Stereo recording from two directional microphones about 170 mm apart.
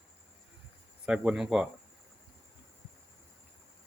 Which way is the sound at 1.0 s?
5° right (ahead or behind).